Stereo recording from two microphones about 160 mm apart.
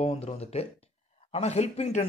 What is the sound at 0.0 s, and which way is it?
Speech, 40° left (ahead or behind).